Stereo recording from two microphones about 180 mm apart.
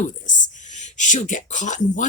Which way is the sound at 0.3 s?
45° left (ahead or behind).